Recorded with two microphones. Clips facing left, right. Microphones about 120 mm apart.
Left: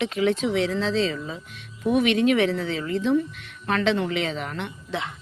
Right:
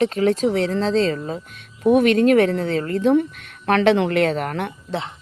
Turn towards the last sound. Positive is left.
turn(degrees=-30)  # may be behind; listen again after turning